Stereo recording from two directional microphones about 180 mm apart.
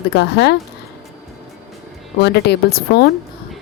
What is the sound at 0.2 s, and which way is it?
Speech, 70° left (ahead or behind).